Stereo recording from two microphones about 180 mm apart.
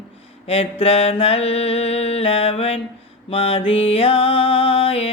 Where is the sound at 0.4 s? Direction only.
30° left (ahead or behind).